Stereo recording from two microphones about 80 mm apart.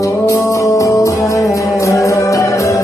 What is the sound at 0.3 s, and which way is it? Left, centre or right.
Music, left.